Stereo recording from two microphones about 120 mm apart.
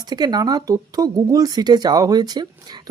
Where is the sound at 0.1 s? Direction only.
35° right (ahead or behind).